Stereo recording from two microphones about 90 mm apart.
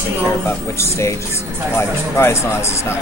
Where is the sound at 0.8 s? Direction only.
35° left (ahead or behind).